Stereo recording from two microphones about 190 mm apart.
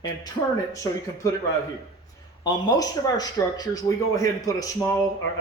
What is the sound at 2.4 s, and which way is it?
A man's voice, 20° left (ahead or behind).